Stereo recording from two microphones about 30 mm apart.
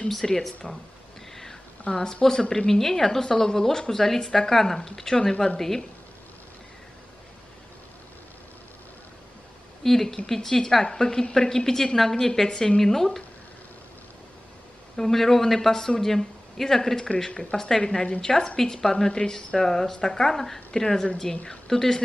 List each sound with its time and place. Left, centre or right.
0.1 s speech: centre
1.3 s a sound: centre
1.9 s a woman's voice: left
9.8 s a woman's voice: centre
15.0 s speech: centre
17.3 s speech: left
17.6 s a woman's voice: centre
18.2 s a woman's voice: centre
19.0 s a woman's voice: left
20.2 s speech: centre
20.7 s a woman's voice: left